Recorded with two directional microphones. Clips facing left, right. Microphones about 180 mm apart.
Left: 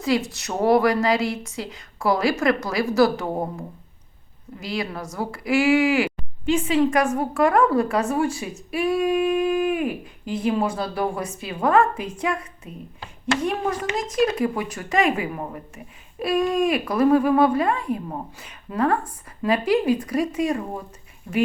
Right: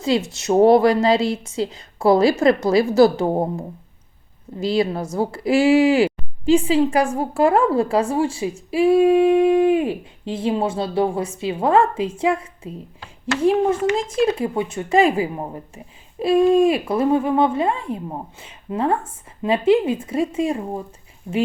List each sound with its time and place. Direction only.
0.0 s speech: 25° right (ahead or behind)
4.6 s speech: 30° right (ahead or behind)